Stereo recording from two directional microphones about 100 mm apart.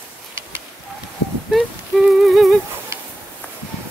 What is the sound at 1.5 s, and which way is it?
Humming, centre (ahead or behind).